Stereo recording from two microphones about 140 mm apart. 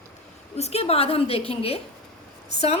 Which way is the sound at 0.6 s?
50° left (ahead or behind).